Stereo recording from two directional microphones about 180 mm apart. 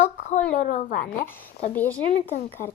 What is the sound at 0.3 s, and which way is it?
Speech, 40° left (ahead or behind).